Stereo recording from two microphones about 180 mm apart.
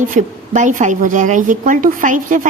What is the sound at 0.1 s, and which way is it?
Speech, 45° right (ahead or behind).